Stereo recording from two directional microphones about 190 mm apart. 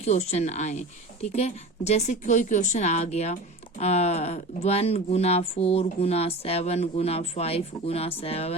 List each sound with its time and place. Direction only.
0.0 s speech: 35° left (ahead or behind)